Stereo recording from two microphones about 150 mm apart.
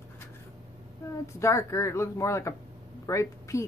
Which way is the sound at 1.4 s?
20° left (ahead or behind).